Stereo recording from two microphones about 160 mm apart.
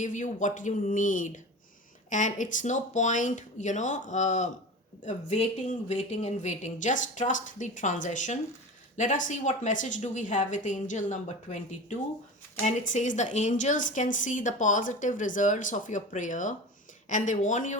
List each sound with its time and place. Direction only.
0.0 s a woman's voice: 50° left (ahead or behind)